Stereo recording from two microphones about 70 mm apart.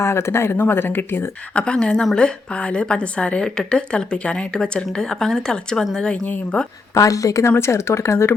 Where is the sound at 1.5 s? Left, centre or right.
Centre.